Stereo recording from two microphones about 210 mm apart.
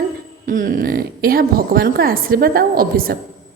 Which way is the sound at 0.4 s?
40° right (ahead or behind).